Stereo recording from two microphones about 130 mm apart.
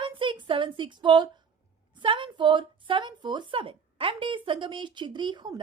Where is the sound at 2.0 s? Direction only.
40° right (ahead or behind).